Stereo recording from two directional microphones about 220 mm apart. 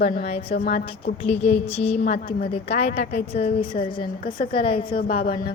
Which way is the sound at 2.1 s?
45° left (ahead or behind).